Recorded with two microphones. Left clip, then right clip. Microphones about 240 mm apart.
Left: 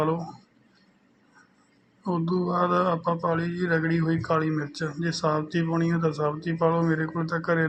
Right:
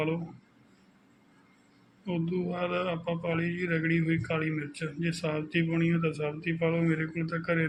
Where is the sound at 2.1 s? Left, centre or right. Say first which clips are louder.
Left 6 dB; centre.